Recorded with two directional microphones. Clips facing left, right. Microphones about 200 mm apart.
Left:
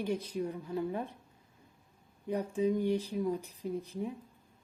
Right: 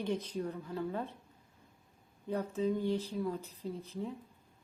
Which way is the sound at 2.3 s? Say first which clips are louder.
Left 2 dB; 15° left (ahead or behind).